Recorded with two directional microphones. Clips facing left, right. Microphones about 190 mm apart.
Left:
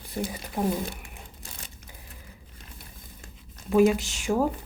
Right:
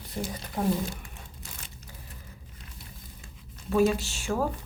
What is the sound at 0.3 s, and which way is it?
Speech, 10° left (ahead or behind).